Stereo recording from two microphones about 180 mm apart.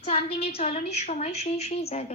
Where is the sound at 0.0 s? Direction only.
30° left (ahead or behind).